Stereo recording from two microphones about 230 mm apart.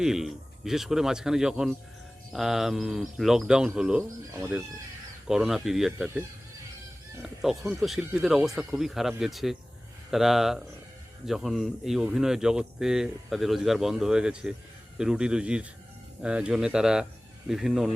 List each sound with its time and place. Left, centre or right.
0.0 s speech: centre